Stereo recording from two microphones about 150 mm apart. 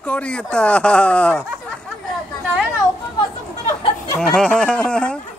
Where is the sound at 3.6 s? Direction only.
30° left (ahead or behind).